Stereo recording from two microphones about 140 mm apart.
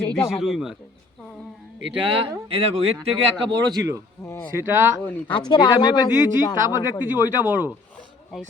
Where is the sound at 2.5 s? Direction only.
45° right (ahead or behind).